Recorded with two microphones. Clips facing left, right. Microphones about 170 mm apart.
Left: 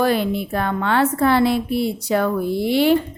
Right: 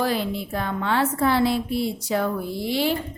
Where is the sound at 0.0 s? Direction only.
60° left (ahead or behind).